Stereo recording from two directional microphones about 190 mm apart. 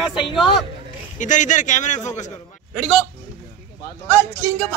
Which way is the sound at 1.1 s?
40° left (ahead or behind).